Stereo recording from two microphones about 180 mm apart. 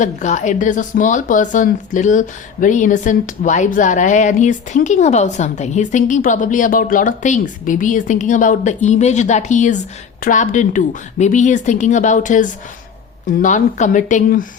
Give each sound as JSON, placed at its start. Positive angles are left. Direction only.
{"t": 0.0, "sound": "speech", "side_deg": 45}